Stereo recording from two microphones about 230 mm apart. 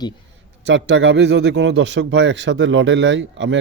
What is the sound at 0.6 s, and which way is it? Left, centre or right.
A man's voice, right.